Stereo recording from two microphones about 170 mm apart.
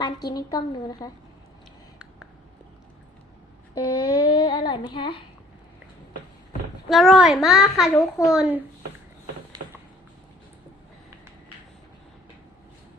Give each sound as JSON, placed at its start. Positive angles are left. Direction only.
{"t": 0.0, "sound": "a woman's voice", "side_deg": 25}
{"t": 3.8, "sound": "child singing", "side_deg": 25}
{"t": 6.8, "sound": "a child's voice", "side_deg": 0}